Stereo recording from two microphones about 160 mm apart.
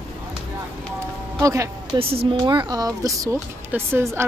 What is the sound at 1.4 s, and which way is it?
Speech, 20° right (ahead or behind).